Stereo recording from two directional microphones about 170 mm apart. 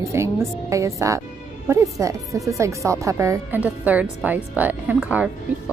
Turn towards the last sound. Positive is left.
turn(degrees=-10)  # may be behind; listen again after turning